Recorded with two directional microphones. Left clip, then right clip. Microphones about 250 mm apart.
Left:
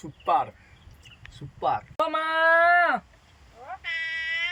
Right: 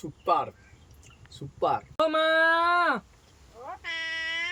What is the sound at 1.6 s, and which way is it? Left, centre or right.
Speech, centre.